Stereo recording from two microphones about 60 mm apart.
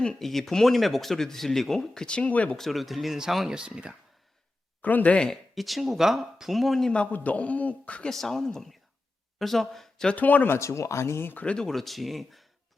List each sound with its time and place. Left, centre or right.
0.0 s speech: centre; by 2.6 s left
2.6 s speech: centre
4.8 s speech: left
5.1 s speech: centre
5.5 s speech: centre
6.9 s speech: left
8.1 s speech: centre
10.2 s speech: left
10.5 s speech: left
11.3 s speech: centre